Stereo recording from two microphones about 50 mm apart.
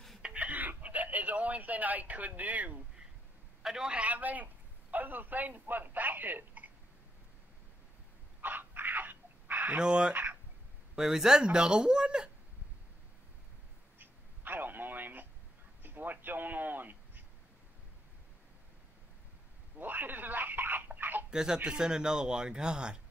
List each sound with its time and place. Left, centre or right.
0.2 s a sound: right
3.6 s a man's voice: centre
3.9 s speech: right
8.4 s dog: right
9.8 s speech: centre
11.0 s speech: centre
13.9 s telephone: right
15.8 s a man's voice: right
19.8 s a sound: right
21.3 s speech: centre